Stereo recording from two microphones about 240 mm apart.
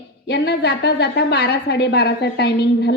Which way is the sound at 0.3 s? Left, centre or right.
Left.